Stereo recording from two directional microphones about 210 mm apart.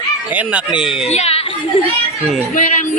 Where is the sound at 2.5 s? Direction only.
35° left (ahead or behind).